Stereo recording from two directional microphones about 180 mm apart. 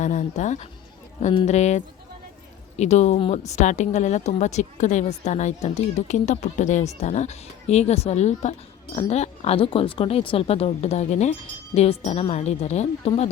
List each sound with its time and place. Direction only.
0.0 s speech: 40° left (ahead or behind)